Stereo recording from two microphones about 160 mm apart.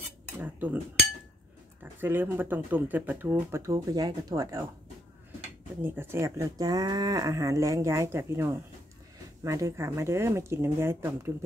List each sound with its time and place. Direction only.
0.4 s speech: 10° right (ahead or behind)
1.8 s speech: 10° right (ahead or behind)
5.8 s speech: 15° right (ahead or behind)